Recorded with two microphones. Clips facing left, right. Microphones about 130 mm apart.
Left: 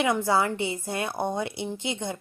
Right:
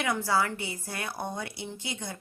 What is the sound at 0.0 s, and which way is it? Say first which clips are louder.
A woman's voice: left 4 dB; 20° left (ahead or behind).